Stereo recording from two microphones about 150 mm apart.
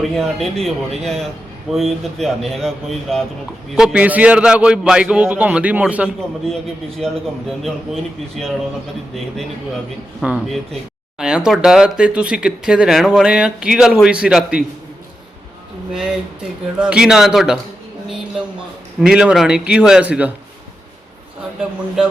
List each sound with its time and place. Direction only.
0.0 s a man's voice: centre (ahead or behind)
6.4 s speech: 5° left (ahead or behind)
8.4 s speech: centre (ahead or behind)
10.2 s speech: 5° right (ahead or behind)
15.9 s speech: 5° right (ahead or behind)
18.9 s speech: 5° right (ahead or behind)